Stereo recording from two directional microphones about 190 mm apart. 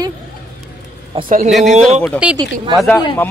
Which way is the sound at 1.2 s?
45° right (ahead or behind).